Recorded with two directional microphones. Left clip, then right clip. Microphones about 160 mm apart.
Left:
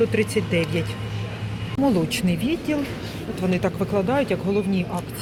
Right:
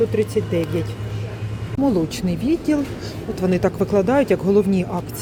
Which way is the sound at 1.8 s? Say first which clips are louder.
Right 1 dB; 20° right (ahead or behind).